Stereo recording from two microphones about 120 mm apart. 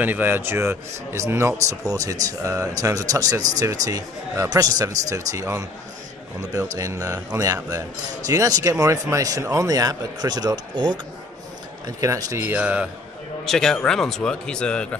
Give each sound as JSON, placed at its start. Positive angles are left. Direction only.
{"t": 0.0, "sound": "speech", "side_deg": -15}
{"t": 12.0, "sound": "speech", "side_deg": -25}
{"t": 13.5, "sound": "a man's voice", "side_deg": 5}